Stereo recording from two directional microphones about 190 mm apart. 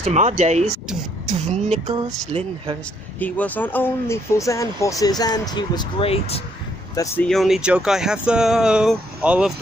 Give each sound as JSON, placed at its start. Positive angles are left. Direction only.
{"t": 0.0, "sound": "speech", "side_deg": -35}
{"t": 3.2, "sound": "speech", "side_deg": 10}
{"t": 7.2, "sound": "speech", "side_deg": 0}